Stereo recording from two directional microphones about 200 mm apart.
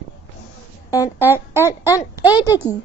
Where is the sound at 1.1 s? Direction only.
10° right (ahead or behind).